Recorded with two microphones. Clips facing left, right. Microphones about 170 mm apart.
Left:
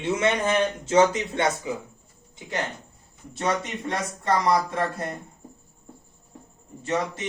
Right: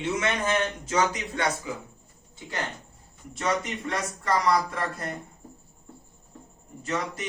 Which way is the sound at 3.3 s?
30° left (ahead or behind).